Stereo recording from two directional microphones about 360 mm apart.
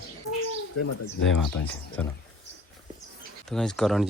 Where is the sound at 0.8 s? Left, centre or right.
Left.